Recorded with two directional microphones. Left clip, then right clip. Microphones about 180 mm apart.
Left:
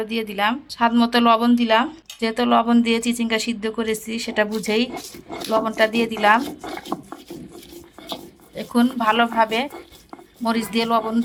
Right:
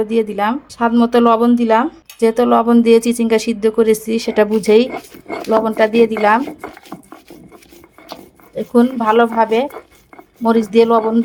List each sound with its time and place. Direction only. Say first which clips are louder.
0.0 s speech: right 6 dB; 40° right (ahead or behind)
5.3 s speech: right 6 dB; 25° right (ahead or behind)
8.5 s speech: right 7 dB; 40° right (ahead or behind)